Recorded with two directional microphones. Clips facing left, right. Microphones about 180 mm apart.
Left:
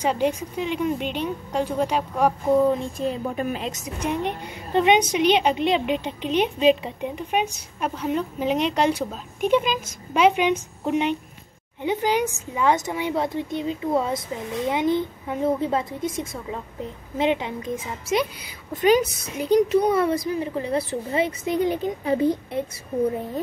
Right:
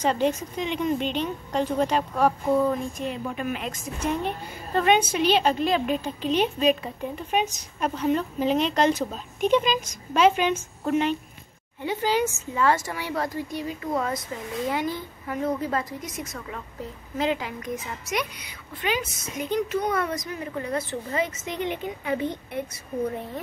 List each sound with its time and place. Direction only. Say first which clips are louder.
0.0 s a woman's voice: left 1 dB; 10° left (ahead or behind); by 18.2 s 25° left (ahead or behind)
18.7 s speech: left 10 dB; 45° left (ahead or behind)